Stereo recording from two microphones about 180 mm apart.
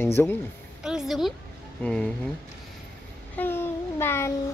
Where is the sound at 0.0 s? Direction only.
10° left (ahead or behind).